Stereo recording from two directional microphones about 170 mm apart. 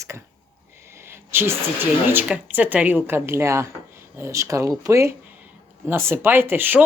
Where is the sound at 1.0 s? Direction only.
15° right (ahead or behind).